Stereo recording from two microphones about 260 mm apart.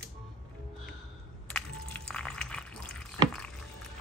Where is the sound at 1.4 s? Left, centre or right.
Centre.